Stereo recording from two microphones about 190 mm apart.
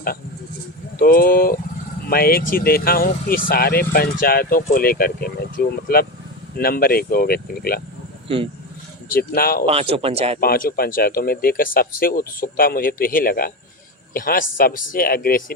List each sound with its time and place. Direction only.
0.9 s speech: 50° left (ahead or behind)
8.3 s speech: 30° right (ahead or behind)
9.1 s speech: 50° left (ahead or behind)
9.6 s speech: 30° right (ahead or behind)
10.4 s speech: 50° left (ahead or behind)